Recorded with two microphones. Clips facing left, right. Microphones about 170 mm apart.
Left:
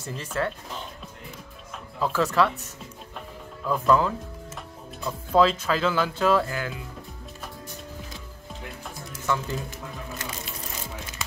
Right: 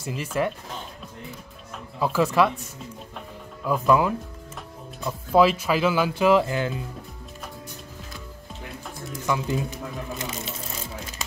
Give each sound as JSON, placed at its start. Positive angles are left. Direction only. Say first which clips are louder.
{"t": 0.0, "sound": "speech", "louder": "right 3 dB", "side_deg": -10}
{"t": 2.0, "sound": "speech", "louder": "right 2 dB", "side_deg": -10}
{"t": 9.2, "sound": "speech", "louder": "right 2 dB", "side_deg": -15}